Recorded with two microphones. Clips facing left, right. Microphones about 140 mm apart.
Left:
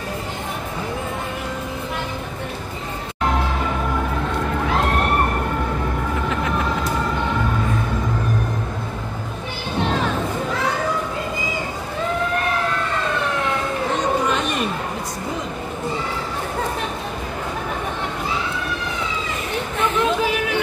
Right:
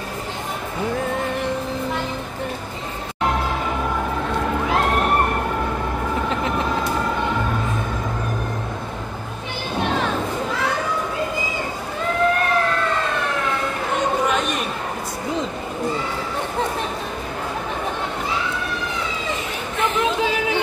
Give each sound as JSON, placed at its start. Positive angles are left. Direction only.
{"t": 19.8, "sound": "chatter", "side_deg": -20}